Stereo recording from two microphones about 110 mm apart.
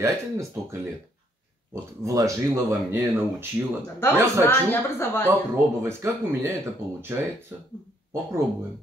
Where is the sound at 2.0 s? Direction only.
30° right (ahead or behind).